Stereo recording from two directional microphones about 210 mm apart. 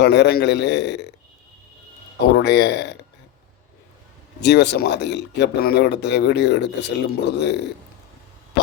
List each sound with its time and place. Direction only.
0.0 s a man's voice: 55° left (ahead or behind)
2.3 s a man's voice: 55° left (ahead or behind)
4.4 s a man's voice: 55° left (ahead or behind)